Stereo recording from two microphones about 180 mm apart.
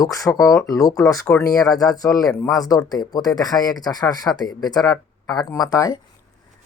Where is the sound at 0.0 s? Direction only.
20° left (ahead or behind).